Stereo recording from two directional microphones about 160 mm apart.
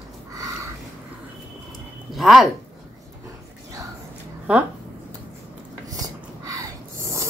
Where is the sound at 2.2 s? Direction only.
Centre (ahead or behind).